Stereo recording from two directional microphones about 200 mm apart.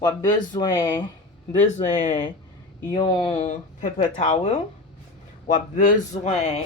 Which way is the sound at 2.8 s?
20° left (ahead or behind).